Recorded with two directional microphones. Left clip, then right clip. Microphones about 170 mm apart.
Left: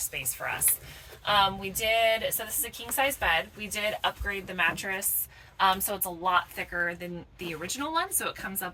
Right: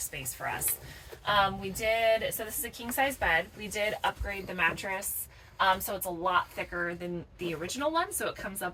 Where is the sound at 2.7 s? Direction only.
30° right (ahead or behind).